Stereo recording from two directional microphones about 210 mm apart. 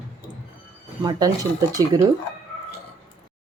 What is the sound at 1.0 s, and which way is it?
Speech, 20° right (ahead or behind).